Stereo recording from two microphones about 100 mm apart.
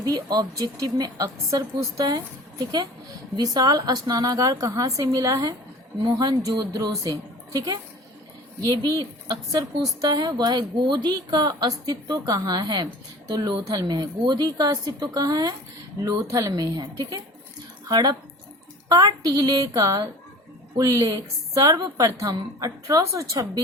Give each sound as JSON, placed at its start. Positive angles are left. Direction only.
{"t": 0.0, "sound": "a woman's voice", "side_deg": -40}